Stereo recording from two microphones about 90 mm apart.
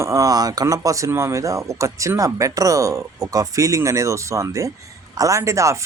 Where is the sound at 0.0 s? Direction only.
35° right (ahead or behind).